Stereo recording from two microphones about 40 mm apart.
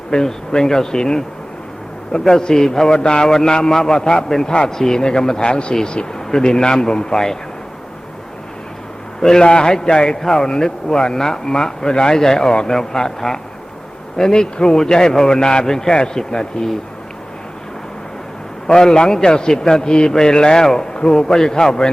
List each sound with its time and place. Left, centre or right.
0.1 s a man's voice: centre
9.2 s a man's voice: centre
18.7 s a man's voice: centre